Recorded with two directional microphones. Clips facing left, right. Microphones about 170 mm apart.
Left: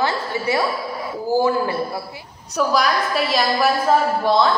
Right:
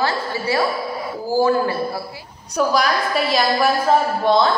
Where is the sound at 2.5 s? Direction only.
Centre (ahead or behind).